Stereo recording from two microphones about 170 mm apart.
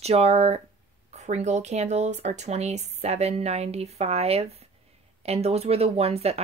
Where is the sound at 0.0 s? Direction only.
40° right (ahead or behind).